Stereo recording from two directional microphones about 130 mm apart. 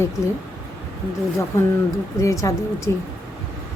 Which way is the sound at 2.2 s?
25° left (ahead or behind).